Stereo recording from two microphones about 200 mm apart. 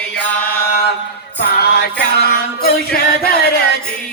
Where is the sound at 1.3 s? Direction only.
55° left (ahead or behind).